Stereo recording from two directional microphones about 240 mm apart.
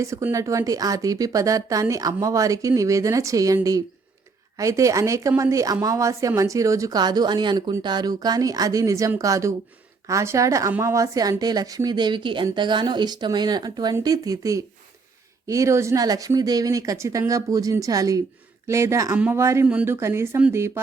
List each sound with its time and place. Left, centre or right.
0.0 s a woman's voice: centre